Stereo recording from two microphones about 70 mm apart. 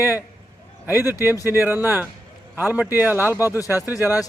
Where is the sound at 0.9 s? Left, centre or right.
Right.